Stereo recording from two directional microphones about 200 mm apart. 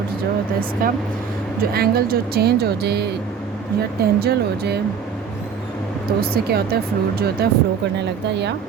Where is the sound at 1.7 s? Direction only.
50° right (ahead or behind).